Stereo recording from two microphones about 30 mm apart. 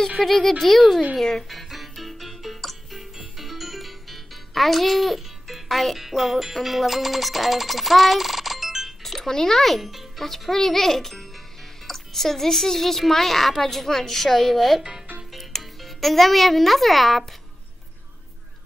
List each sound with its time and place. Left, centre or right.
0.2 s speech: centre
1.5 s music: centre
9.3 s speech: centre
9.6 s speech: centre